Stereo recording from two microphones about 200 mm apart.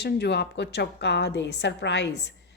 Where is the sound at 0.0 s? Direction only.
55° left (ahead or behind).